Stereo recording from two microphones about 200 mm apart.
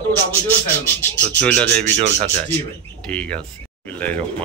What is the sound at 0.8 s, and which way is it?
A man's voice, 10° left (ahead or behind).